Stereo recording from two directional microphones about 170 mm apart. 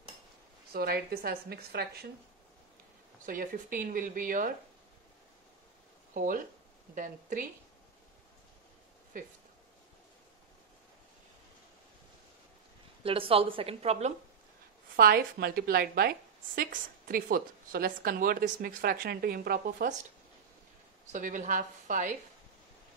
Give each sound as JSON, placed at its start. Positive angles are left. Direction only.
{"t": 0.7, "sound": "a woman's voice", "side_deg": -65}
{"t": 3.3, "sound": "speech", "side_deg": -50}
{"t": 6.1, "sound": "a woman's voice", "side_deg": -55}
{"t": 13.0, "sound": "a woman's voice", "side_deg": -35}
{"t": 15.0, "sound": "a woman's voice", "side_deg": -65}
{"t": 21.1, "sound": "speech", "side_deg": -50}